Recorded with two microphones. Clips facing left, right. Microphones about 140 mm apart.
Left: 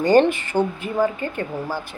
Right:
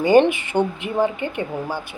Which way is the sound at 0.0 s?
10° right (ahead or behind).